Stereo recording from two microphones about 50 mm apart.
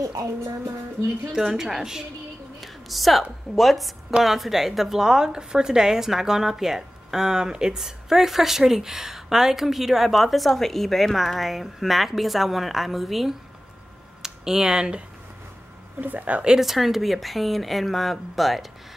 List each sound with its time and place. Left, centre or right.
1.3 s a woman's voice: centre
16.0 s speech: right
16.4 s a woman's voice: centre